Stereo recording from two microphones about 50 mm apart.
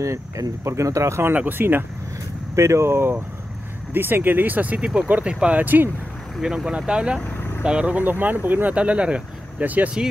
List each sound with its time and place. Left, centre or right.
0.0 s speech: right
1.3 s speech: right
2.5 s speech: right
3.9 s speech: right
5.6 s speech: right
6.4 s speech: centre
7.3 s vehicle: left
7.6 s speech: right
8.7 s speech: right
9.6 s speech: right